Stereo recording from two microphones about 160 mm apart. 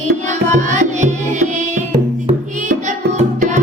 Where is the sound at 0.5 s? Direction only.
50° right (ahead or behind).